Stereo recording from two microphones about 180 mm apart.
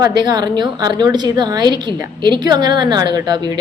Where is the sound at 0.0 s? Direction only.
25° right (ahead or behind).